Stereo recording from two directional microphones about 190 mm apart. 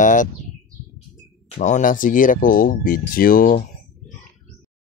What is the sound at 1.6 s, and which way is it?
Speech, 40° left (ahead or behind).